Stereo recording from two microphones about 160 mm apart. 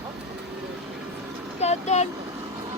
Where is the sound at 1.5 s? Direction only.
45° left (ahead or behind).